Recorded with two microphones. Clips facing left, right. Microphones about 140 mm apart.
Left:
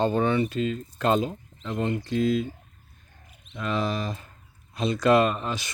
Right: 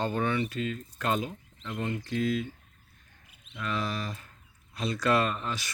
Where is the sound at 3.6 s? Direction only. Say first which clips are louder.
Left 5 dB; 20° left (ahead or behind).